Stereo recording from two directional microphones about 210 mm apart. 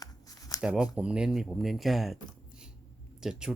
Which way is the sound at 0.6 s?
5° right (ahead or behind).